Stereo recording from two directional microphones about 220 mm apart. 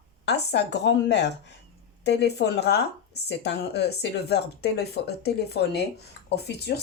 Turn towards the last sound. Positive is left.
turn(degrees=50)  # may be behind; listen again after turning